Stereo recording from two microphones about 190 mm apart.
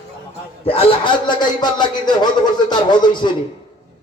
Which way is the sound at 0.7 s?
30° left (ahead or behind).